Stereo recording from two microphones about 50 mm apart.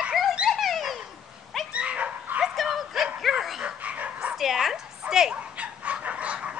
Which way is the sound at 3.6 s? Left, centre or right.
Right.